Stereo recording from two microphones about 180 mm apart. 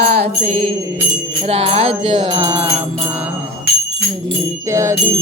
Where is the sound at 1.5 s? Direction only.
35° right (ahead or behind).